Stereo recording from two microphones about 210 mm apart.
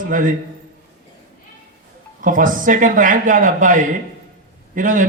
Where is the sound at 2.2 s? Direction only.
40° right (ahead or behind).